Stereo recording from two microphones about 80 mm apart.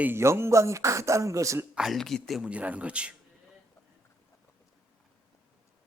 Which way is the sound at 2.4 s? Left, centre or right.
Centre.